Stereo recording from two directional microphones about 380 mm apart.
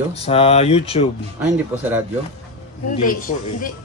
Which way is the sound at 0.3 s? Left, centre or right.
Centre.